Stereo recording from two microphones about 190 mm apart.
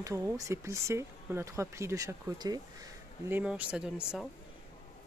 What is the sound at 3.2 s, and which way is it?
Speech, 10° right (ahead or behind).